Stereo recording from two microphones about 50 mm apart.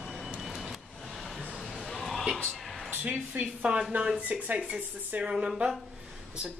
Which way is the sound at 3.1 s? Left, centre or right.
Right.